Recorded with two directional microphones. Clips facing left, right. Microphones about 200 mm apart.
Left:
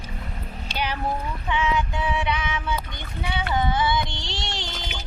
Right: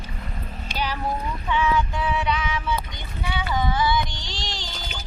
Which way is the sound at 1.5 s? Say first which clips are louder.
Right 2 dB; 20° left (ahead or behind).